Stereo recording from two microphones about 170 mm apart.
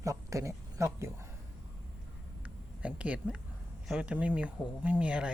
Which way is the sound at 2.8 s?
5° right (ahead or behind).